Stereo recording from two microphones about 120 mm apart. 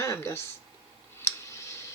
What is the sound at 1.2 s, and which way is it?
Clicking, 25° left (ahead or behind).